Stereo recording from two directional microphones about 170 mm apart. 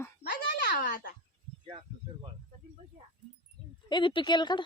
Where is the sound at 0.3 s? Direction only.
75° left (ahead or behind).